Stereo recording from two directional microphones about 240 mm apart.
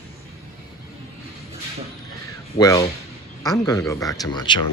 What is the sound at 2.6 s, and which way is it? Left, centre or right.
Speech, centre.